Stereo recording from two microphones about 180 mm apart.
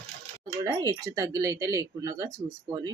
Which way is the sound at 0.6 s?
20° right (ahead or behind).